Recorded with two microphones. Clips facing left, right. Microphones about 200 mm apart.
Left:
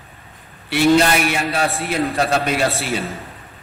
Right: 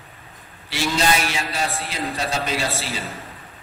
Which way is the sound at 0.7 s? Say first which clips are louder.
Left 8 dB; 60° left (ahead or behind).